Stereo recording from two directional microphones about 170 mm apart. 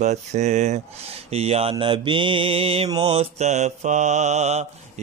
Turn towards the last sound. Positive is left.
turn(degrees=-40)  # may be behind; listen again after turning